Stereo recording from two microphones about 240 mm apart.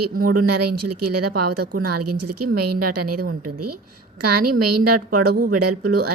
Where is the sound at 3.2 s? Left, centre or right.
Right.